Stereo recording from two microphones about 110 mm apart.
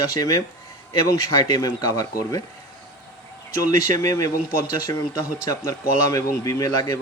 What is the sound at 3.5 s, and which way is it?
Speech, 30° left (ahead or behind).